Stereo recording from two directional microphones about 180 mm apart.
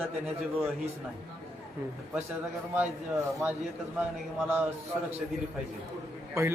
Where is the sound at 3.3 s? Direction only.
10° right (ahead or behind).